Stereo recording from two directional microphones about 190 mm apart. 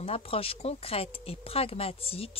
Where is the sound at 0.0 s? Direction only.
30° left (ahead or behind).